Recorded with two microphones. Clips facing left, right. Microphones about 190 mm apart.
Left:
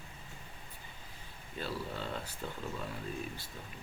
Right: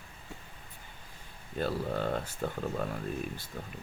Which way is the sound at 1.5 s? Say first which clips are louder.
Right 7 dB; 55° right (ahead or behind).